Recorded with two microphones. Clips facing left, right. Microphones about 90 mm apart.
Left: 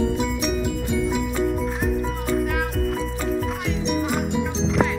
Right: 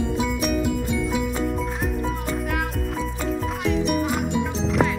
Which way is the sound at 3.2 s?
Centre (ahead or behind).